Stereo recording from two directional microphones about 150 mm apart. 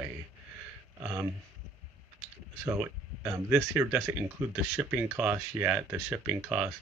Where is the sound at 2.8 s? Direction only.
10° right (ahead or behind).